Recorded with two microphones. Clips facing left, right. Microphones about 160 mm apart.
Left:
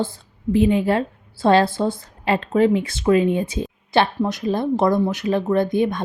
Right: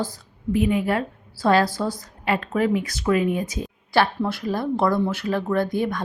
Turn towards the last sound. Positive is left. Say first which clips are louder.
# left 4 dB
turn(degrees=20)  # may be behind; listen again after turning